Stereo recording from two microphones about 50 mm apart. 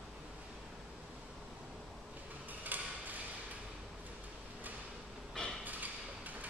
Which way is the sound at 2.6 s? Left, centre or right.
Right.